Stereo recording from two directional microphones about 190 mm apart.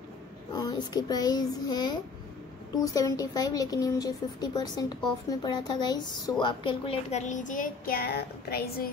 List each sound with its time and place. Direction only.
0.6 s a woman's voice: 20° left (ahead or behind); by 8.8 s 55° left (ahead or behind)